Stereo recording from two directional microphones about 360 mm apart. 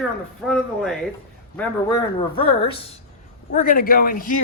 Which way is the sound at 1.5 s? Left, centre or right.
Centre.